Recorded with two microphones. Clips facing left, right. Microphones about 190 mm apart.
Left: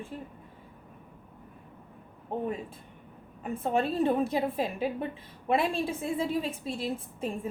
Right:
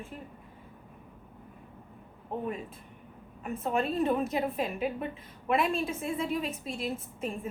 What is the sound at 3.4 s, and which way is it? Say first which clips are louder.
A woman's voice: left 2 dB; 30° left (ahead or behind).